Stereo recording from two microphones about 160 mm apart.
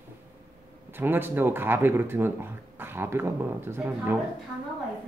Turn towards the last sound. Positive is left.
turn(degrees=-15)  # may be behind; listen again after turning